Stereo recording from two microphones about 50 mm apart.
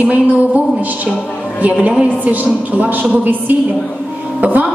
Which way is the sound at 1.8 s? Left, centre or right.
Right.